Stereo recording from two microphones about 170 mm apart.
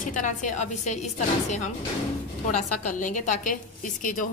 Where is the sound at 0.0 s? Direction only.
50° left (ahead or behind).